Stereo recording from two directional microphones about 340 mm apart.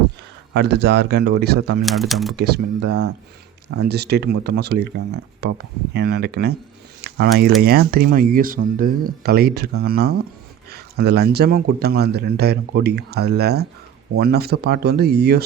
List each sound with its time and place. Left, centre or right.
0.5 s speech: right
1.8 s speech: centre
2.3 s speech: right